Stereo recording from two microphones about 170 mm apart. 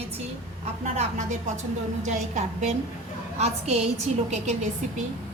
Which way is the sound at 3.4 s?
40° right (ahead or behind).